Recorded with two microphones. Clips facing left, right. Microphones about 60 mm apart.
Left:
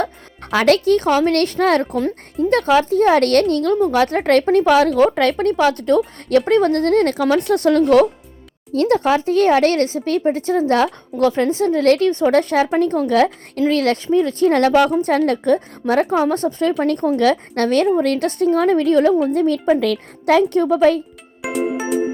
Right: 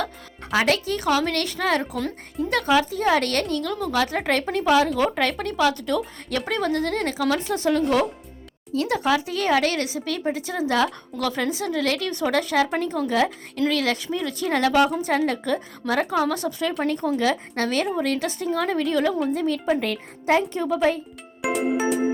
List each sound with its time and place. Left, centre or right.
0.5 s speech: left
1.0 s speech: left
8.7 s a woman's voice: left
12.0 s a woman's voice: left
12.3 s speech: left
13.6 s speech: left
15.5 s a woman's voice: left
16.8 s speech: left
19.7 s speech: left
20.5 s speech: left
21.4 s music: centre